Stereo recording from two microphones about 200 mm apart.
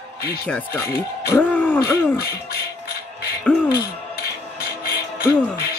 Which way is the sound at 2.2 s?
50° left (ahead or behind).